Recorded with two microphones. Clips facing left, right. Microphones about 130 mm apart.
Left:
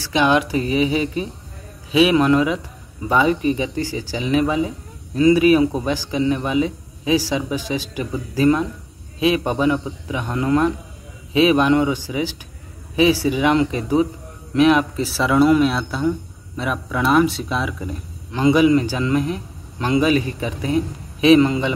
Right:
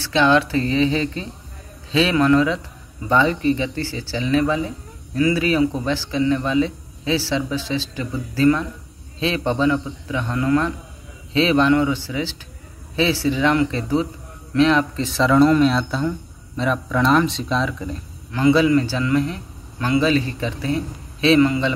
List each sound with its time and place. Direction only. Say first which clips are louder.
0.0 s speech: right 1 dB; 15° left (ahead or behind)